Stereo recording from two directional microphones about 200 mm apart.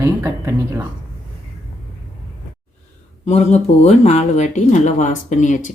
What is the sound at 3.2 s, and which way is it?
Speech, 35° left (ahead or behind).